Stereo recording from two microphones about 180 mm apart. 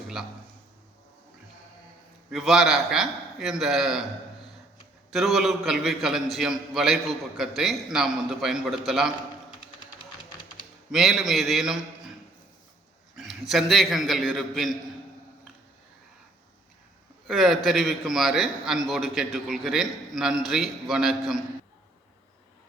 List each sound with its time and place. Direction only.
2.3 s a man's voice: centre (ahead or behind)
5.1 s a man's voice: centre (ahead or behind)
10.9 s a man's voice: centre (ahead or behind)
13.1 s a man's voice: centre (ahead or behind)
17.2 s a man's voice: centre (ahead or behind)